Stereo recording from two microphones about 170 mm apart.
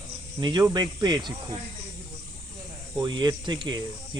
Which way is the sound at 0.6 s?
20° right (ahead or behind).